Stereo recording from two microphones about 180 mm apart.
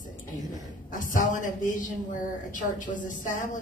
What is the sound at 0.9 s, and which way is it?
Speech, 45° left (ahead or behind).